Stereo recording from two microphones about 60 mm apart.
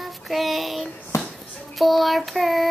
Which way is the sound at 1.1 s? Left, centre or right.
Left.